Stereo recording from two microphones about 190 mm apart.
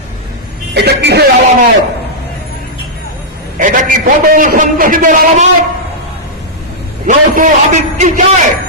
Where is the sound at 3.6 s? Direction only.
45° right (ahead or behind).